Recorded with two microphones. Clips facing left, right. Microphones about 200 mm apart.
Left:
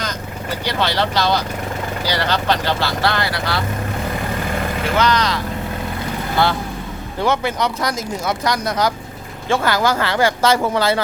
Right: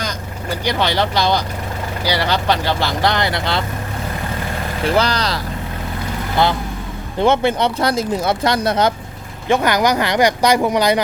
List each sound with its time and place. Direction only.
0.6 s speech: 15° right (ahead or behind)
4.9 s speech: 35° right (ahead or behind)
7.2 s speech: 25° right (ahead or behind)
9.5 s speech: 20° right (ahead or behind)